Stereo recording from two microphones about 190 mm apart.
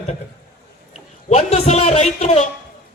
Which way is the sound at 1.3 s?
35° left (ahead or behind).